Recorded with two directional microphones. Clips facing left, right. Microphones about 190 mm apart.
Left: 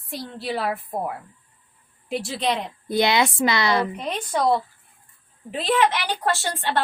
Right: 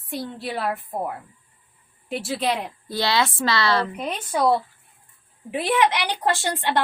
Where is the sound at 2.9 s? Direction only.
20° left (ahead or behind).